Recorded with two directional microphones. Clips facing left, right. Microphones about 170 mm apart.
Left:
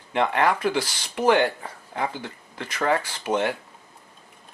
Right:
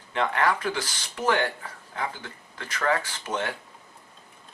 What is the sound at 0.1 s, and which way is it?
Speech, 20° left (ahead or behind).